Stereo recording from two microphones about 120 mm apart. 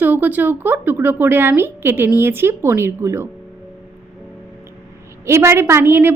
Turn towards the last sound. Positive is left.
turn(degrees=-20)  # may be behind; listen again after turning